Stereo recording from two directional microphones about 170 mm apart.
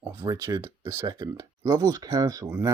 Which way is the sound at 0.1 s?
20° right (ahead or behind).